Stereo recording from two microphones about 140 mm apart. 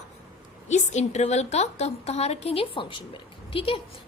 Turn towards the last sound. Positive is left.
turn(degrees=40)  # may be behind; listen again after turning